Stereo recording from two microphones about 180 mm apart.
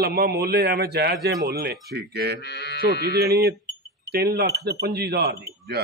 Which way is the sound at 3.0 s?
65° right (ahead or behind).